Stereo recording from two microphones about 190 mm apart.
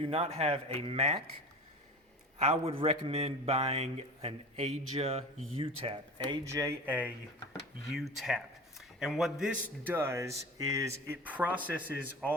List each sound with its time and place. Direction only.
0.0 s a man's voice: 30° right (ahead or behind)
2.4 s a man's voice: 30° right (ahead or behind)
6.5 s a man's voice: 15° right (ahead or behind)